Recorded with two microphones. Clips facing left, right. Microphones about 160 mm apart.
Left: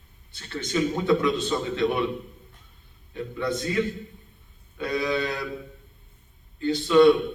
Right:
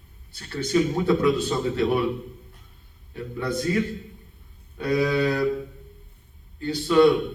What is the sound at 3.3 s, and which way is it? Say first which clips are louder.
Speech: right 3 dB; 40° right (ahead or behind).